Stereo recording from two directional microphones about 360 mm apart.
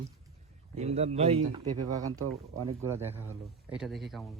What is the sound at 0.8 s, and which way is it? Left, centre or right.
A man's voice, centre.